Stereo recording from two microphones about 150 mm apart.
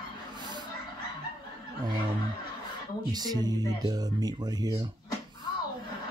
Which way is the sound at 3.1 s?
25° right (ahead or behind).